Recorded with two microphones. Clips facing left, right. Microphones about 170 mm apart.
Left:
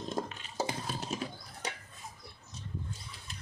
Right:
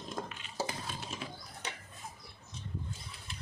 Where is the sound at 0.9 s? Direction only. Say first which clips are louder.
Left 5 dB; 40° left (ahead or behind).